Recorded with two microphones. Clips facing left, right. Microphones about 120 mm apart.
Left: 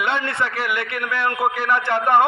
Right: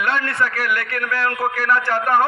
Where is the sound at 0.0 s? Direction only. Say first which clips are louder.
Right 1 dB; 25° left (ahead or behind).